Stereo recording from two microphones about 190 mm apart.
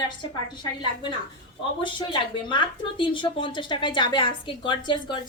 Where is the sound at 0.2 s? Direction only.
25° left (ahead or behind).